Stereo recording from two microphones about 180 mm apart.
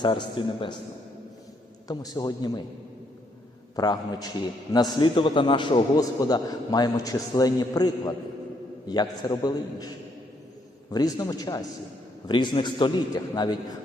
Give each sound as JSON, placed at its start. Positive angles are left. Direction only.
{"t": 0.0, "sound": "a man's voice", "side_deg": 25}
{"t": 1.9, "sound": "a man's voice", "side_deg": 20}
{"t": 3.8, "sound": "a man's voice", "side_deg": 20}
{"t": 10.9, "sound": "a man's voice", "side_deg": 20}